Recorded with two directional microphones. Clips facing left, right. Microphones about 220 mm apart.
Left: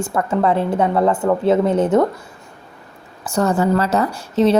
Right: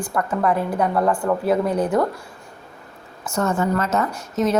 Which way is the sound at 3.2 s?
35° left (ahead or behind).